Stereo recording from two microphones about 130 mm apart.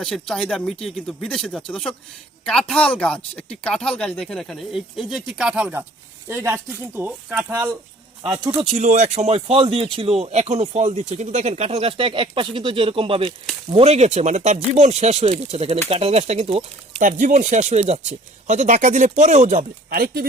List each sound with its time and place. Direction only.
0.0 s speech: centre (ahead or behind)
6.2 s speech: 20° right (ahead or behind)
8.8 s speech: 65° right (ahead or behind); by 16.6 s 50° right (ahead or behind)
17.0 s speech: 80° right; by 18.0 s 55° right (ahead or behind)
18.4 s speech: 70° right (ahead or behind)